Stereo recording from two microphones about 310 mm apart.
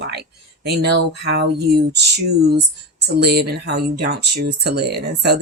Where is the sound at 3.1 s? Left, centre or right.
Right.